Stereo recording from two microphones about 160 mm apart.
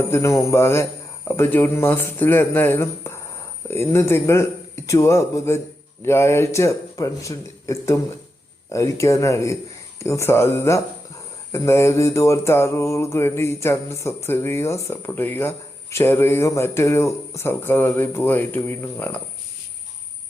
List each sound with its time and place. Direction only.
0.1 s mantra: 20° left (ahead or behind)
8.7 s speech: 20° left (ahead or behind)
10.0 s mantra: 15° left (ahead or behind)